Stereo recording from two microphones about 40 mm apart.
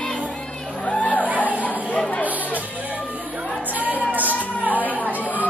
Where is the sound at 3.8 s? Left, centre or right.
Right.